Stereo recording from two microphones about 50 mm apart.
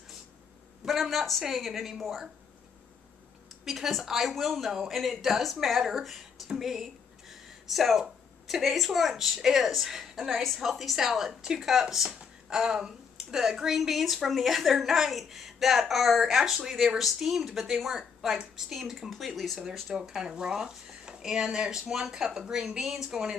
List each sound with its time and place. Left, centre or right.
0.8 s speech: centre
3.6 s speech: centre